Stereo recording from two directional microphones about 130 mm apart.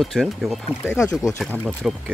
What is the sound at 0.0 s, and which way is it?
Speech, centre (ahead or behind).